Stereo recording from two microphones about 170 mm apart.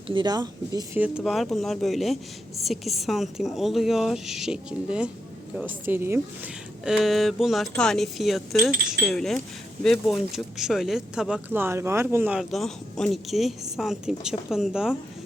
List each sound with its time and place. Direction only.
0.1 s speech: 25° right (ahead or behind)
0.9 s a woman's voice: 5° right (ahead or behind)
6.8 s speech: centre (ahead or behind)